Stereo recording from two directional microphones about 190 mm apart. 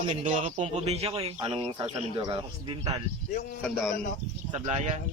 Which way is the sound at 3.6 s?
Centre (ahead or behind).